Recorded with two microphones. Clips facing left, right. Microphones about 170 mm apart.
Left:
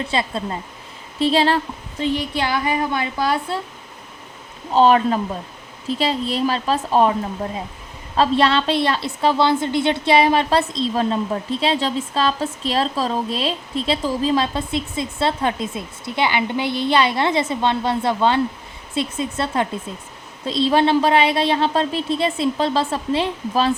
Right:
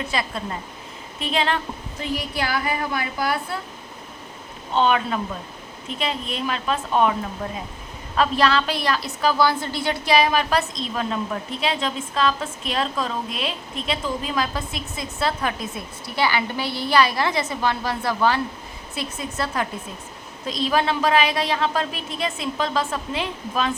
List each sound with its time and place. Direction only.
0.1 s a woman's voice: 25° left (ahead or behind)
4.7 s a woman's voice: 35° left (ahead or behind)